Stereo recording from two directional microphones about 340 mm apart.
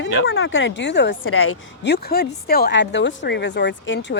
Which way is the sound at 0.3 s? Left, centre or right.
Left.